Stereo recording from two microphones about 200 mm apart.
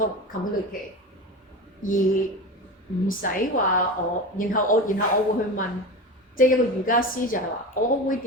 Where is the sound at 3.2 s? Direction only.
45° left (ahead or behind).